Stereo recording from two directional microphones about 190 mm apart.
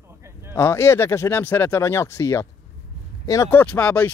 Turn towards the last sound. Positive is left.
turn(degrees=10)  # may be behind; listen again after turning